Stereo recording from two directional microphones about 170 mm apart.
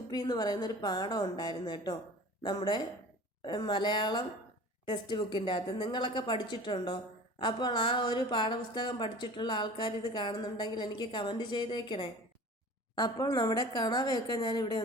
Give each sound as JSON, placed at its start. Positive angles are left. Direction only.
{"t": 0.1, "sound": "a woman's voice", "side_deg": 25}